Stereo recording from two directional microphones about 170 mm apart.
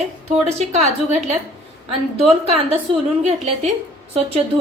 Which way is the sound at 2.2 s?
35° right (ahead or behind).